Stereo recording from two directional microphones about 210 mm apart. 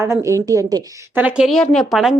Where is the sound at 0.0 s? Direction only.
15° right (ahead or behind).